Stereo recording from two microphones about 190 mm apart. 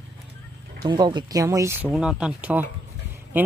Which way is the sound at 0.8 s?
25° right (ahead or behind).